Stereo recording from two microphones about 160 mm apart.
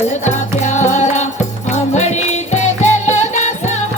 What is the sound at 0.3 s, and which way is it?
Music, 45° left (ahead or behind).